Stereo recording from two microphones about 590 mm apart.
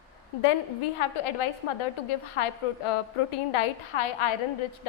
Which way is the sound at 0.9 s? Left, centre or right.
Left.